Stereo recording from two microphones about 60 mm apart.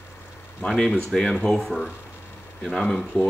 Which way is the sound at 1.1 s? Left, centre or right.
Centre.